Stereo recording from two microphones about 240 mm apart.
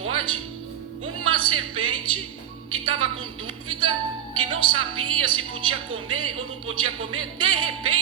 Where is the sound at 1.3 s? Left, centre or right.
Right.